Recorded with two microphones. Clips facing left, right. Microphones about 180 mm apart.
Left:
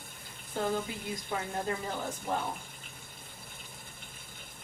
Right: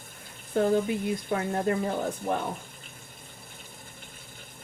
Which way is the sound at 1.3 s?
60° right (ahead or behind).